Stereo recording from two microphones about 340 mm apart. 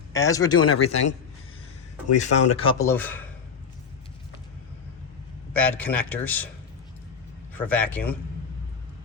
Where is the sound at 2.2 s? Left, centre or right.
Centre.